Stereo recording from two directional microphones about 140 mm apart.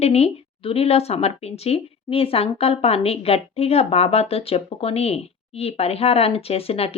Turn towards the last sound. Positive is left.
turn(degrees=45)  # may be behind; listen again after turning